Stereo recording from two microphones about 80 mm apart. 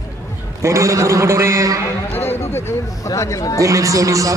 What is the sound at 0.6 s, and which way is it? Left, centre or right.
A man's voice, right.